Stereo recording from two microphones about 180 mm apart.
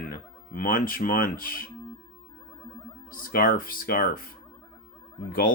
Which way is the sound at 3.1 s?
50° left (ahead or behind).